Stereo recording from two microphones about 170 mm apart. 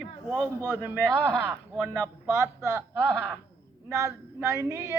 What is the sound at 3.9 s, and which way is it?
Speech, 15° right (ahead or behind).